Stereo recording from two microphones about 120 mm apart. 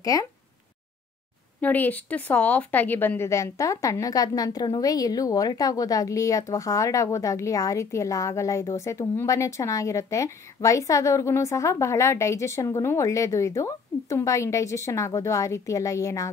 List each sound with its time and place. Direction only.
0.0 s speech: 30° left (ahead or behind)
1.6 s a woman's voice: 15° left (ahead or behind)